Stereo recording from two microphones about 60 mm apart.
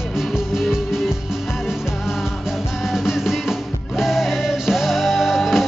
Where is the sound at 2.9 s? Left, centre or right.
Centre.